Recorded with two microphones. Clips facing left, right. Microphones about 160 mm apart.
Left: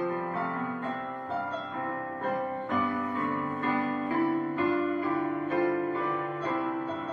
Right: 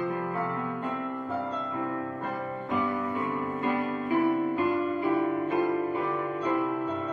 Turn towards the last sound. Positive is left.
turn(degrees=-20)  # may be behind; listen again after turning